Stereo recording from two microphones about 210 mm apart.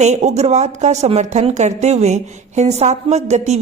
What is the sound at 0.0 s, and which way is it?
A woman's voice, 30° right (ahead or behind).